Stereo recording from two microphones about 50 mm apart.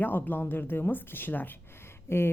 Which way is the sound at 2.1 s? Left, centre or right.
Left.